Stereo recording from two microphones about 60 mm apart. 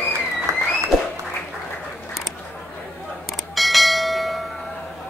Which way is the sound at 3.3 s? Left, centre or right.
Centre.